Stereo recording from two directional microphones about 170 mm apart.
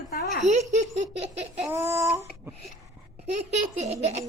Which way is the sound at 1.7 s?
15° right (ahead or behind).